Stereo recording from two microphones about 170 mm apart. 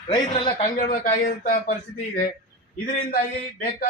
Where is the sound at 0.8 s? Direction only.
50° left (ahead or behind).